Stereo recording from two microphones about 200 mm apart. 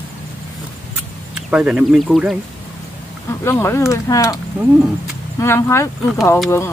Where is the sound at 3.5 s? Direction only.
15° left (ahead or behind).